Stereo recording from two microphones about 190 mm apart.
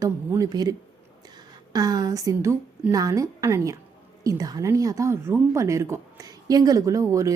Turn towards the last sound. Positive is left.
turn(degrees=-15)  # may be behind; listen again after turning